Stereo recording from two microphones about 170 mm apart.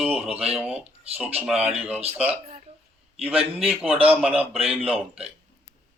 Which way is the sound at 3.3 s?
35° right (ahead or behind).